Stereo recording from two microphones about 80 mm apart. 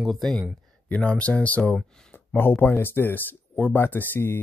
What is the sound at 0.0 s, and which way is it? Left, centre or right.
Speech, centre.